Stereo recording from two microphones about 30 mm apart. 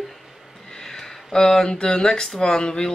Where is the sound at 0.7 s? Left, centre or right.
Centre.